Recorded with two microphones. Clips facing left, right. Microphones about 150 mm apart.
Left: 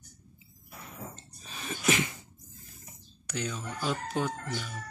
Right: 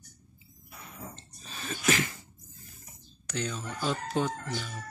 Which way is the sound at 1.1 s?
10° left (ahead or behind).